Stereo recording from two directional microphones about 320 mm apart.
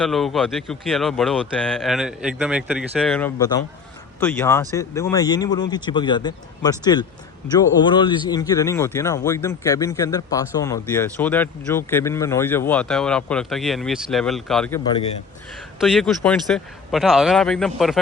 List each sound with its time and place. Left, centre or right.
0.0 s a man's voice: centre
15.8 s speech: centre